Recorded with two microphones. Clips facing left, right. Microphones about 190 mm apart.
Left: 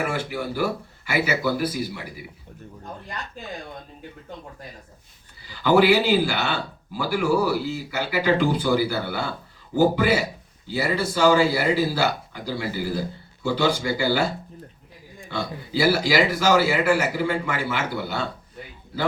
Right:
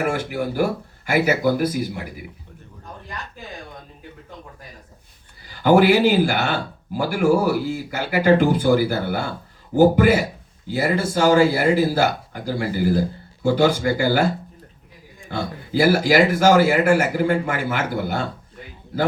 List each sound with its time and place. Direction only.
0.0 s a man's voice: 50° right (ahead or behind)
5.5 s a man's voice: 50° right (ahead or behind)
15.3 s a man's voice: 45° right (ahead or behind)